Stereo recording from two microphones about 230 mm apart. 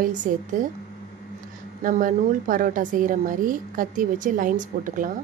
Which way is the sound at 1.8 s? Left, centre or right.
Right.